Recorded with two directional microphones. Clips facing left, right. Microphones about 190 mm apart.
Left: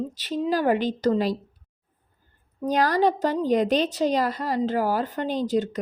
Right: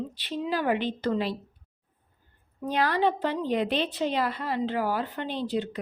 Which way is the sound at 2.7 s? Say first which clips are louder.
Left 4 dB; 40° left (ahead or behind).